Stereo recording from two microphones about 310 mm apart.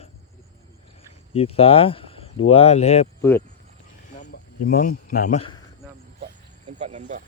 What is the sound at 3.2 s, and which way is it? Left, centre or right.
Speech, centre.